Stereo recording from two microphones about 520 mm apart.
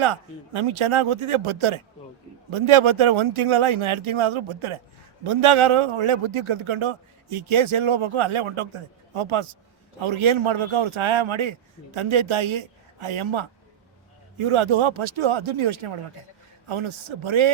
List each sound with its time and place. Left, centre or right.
0.0 s a man's voice: right